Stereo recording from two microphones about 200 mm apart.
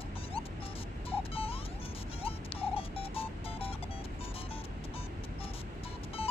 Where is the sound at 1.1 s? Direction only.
30° left (ahead or behind).